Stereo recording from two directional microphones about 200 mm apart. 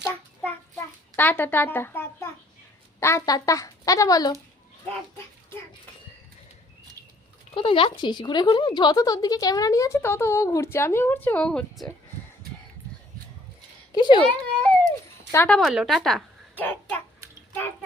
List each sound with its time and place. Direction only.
1.1 s a woman's voice: 10° left (ahead or behind)
7.5 s speech: 25° left (ahead or behind); by 11.9 s 5° left (ahead or behind)
13.9 s speech: 20° left (ahead or behind)
14.3 s a child's voice: 5° left (ahead or behind)